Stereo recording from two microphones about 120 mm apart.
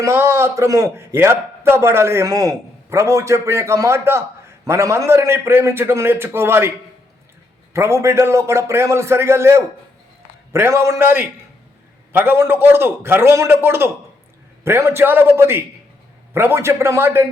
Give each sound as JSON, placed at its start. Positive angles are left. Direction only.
{"t": 0.0, "sound": "a man's voice", "side_deg": -25}
{"t": 7.7, "sound": "a man's voice", "side_deg": -20}